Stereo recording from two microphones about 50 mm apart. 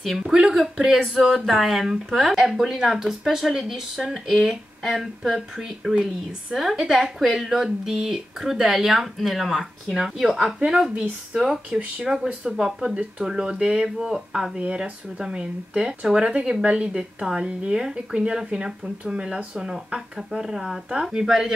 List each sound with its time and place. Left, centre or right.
0.2 s speech: centre
13.8 s a woman's voice: centre